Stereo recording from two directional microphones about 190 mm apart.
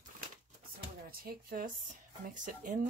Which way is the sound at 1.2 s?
50° right (ahead or behind).